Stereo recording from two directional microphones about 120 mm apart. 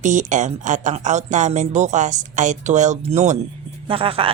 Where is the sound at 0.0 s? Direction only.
90° right; by 3.3 s 70° right (ahead or behind).